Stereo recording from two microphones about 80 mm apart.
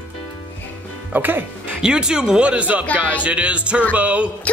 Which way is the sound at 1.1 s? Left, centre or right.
Right.